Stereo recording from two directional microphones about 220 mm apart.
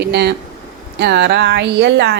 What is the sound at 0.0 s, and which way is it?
A woman's voice, 50° right (ahead or behind).